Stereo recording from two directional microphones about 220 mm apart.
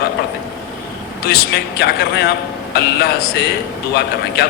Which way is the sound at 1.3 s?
45° left (ahead or behind).